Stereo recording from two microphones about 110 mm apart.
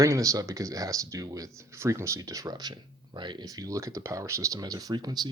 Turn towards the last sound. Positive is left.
turn(degrees=-40)  # may be behind; listen again after turning